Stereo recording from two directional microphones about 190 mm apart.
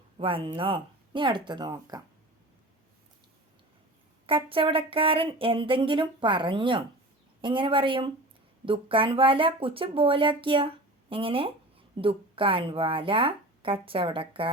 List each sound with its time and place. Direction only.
0.2 s speech: 25° right (ahead or behind)
4.3 s speech: 30° right (ahead or behind)